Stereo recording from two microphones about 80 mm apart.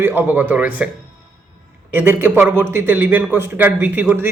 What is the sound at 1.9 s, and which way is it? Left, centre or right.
A man's voice, right.